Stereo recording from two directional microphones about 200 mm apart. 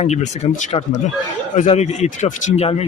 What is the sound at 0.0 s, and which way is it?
Speech, 35° left (ahead or behind).